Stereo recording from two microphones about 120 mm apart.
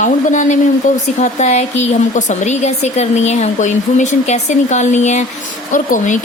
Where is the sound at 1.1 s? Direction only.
75° left (ahead or behind).